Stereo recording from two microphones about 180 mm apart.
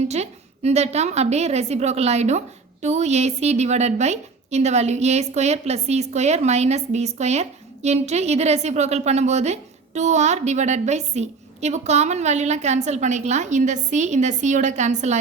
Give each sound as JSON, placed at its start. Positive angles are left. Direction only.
{"t": 0.1, "sound": "a woman's voice", "side_deg": -40}